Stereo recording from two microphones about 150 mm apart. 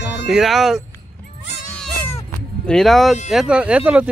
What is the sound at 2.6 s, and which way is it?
Speech, 5° left (ahead or behind).